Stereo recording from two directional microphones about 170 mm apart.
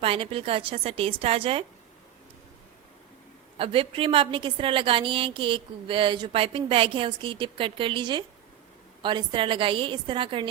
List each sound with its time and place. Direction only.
0.0 s a woman's voice: 35° right (ahead or behind)
3.6 s a woman's voice: 30° right (ahead or behind)